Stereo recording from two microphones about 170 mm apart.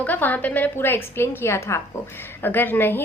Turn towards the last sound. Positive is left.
turn(degrees=10)  # may be behind; listen again after turning